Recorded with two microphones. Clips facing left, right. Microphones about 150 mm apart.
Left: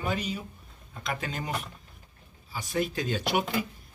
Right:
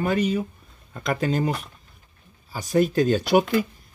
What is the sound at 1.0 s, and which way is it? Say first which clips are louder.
Speech: right 10 dB; 45° right (ahead or behind).